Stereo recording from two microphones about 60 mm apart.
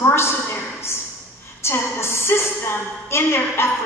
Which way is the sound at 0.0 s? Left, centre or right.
Left.